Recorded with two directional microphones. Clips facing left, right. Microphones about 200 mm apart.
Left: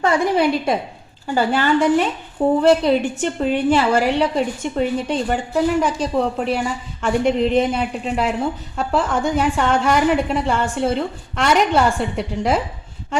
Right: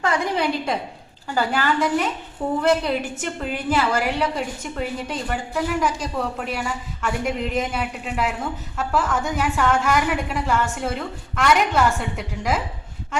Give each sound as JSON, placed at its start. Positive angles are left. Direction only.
{"t": 0.0, "sound": "a woman's voice", "side_deg": 25}